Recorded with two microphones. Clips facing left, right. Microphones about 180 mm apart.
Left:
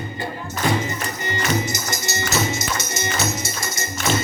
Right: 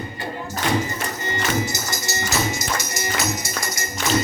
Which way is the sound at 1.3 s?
20° left (ahead or behind).